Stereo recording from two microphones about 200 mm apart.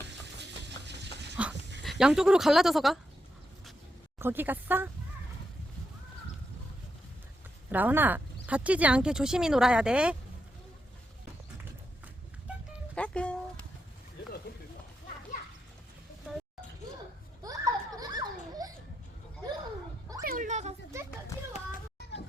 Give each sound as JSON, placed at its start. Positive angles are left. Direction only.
{"t": 0.9, "sound": "dog", "side_deg": -60}
{"t": 1.8, "sound": "speech", "side_deg": 0}
{"t": 4.2, "sound": "speech", "side_deg": -10}
{"t": 7.7, "sound": "speech", "side_deg": -10}
{"t": 12.9, "sound": "music", "side_deg": 5}
{"t": 14.5, "sound": "music", "side_deg": 50}
{"t": 17.4, "sound": "children playing", "side_deg": -15}
{"t": 20.2, "sound": "a sound", "side_deg": -40}